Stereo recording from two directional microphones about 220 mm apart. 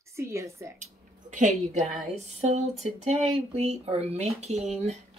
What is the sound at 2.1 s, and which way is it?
Speech, 30° right (ahead or behind).